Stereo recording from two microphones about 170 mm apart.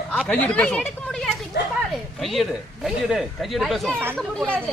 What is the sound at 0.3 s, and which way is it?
Speech, 10° left (ahead or behind).